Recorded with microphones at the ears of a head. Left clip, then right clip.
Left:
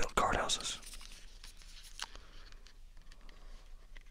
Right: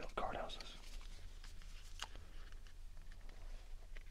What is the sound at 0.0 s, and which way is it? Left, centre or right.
Whispering, left.